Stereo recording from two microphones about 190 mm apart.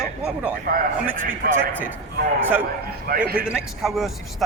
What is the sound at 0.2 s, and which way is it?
Speech, 5° right (ahead or behind).